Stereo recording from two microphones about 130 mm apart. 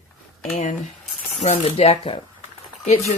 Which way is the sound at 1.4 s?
55° left (ahead or behind).